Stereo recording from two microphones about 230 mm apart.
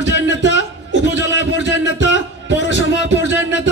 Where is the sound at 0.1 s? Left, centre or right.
Left.